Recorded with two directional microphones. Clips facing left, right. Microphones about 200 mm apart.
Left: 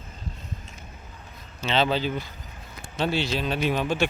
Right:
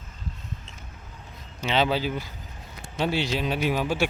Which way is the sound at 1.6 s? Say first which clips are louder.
Even; 10° right (ahead or behind).